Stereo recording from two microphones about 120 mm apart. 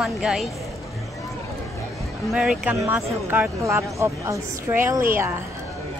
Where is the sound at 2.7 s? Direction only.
20° right (ahead or behind).